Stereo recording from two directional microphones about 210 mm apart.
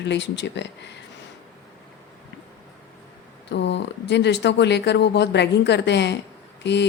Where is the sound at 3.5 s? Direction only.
55° left (ahead or behind).